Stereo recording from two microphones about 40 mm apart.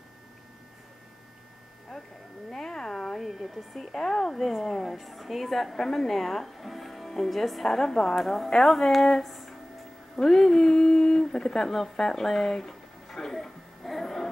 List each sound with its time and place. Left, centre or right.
2.5 s cat: centre
3.2 s a woman's voice: centre
8.2 s a woman's voice: centre